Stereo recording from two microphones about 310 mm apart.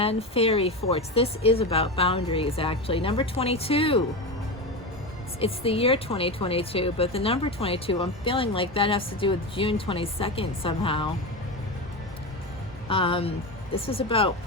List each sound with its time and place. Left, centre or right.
0.0 s speech: centre
5.4 s speech: centre
12.9 s speech: centre